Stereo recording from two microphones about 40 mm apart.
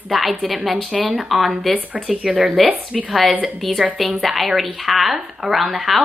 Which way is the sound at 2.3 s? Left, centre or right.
Right.